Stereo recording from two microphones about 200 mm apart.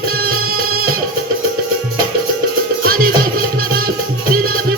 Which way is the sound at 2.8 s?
45° right (ahead or behind).